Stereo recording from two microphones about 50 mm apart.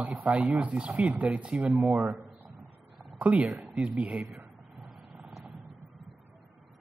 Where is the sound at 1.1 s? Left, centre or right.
Right.